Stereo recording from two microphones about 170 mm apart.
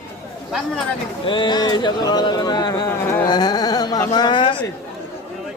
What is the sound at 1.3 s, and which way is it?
Speech, 25° left (ahead or behind).